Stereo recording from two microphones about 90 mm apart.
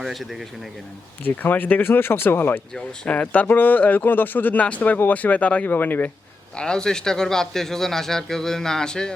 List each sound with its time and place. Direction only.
0.0 s speech: centre (ahead or behind)
1.2 s speech: 20° left (ahead or behind)
2.7 s speech: 10° left (ahead or behind)
6.6 s speech: 10° left (ahead or behind)